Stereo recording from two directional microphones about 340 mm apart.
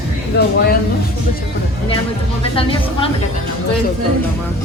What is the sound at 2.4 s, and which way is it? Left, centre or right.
Speech, centre.